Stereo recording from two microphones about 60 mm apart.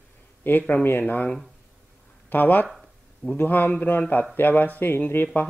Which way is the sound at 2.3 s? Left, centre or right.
Left.